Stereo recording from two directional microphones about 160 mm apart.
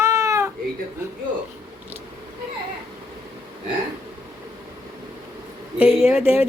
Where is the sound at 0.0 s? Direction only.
20° right (ahead or behind).